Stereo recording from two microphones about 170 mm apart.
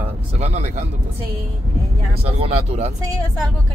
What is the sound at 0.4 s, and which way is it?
Speech, 40° right (ahead or behind).